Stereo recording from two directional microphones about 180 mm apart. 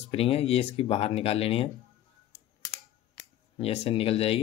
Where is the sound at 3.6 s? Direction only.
35° left (ahead or behind).